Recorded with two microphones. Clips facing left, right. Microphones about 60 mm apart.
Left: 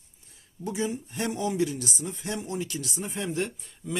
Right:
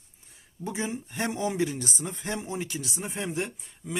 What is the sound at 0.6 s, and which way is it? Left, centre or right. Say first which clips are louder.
Speech: left 2 dB; right.